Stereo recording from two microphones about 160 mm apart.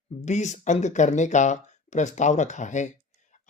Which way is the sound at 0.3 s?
45° left (ahead or behind).